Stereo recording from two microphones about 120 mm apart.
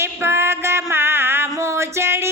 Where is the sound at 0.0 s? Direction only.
20° right (ahead or behind).